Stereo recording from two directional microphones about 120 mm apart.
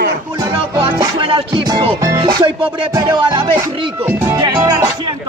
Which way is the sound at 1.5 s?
35° right (ahead or behind).